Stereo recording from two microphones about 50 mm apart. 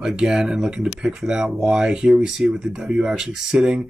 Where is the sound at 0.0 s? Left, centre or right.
Centre.